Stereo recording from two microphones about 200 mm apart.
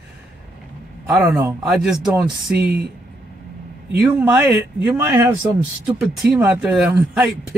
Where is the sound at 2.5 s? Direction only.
55° right (ahead or behind).